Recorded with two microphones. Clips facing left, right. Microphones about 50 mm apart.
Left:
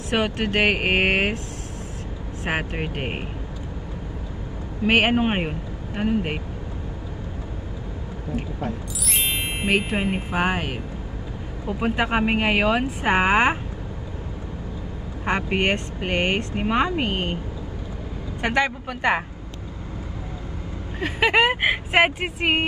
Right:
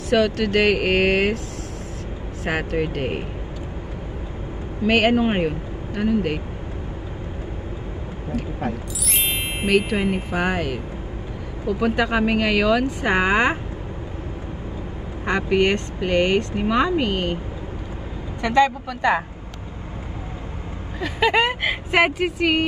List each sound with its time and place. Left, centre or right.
0.1 s speech: left
2.4 s speech: left
4.8 s speech: left
9.7 s speech: left
15.2 s speech: left
18.4 s speech: left
21.0 s speech: left